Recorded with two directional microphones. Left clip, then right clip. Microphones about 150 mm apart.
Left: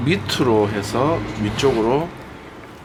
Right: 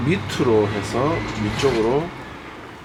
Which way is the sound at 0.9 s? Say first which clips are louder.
Left 2 dB; 35° left (ahead or behind).